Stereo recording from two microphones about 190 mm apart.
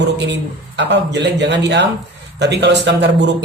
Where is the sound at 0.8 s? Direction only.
65° right (ahead or behind).